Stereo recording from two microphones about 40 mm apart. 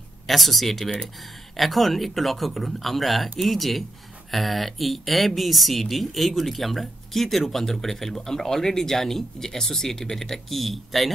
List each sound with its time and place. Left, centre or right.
0.3 s speech: centre